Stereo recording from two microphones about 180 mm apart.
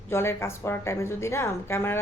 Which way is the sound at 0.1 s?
15° left (ahead or behind).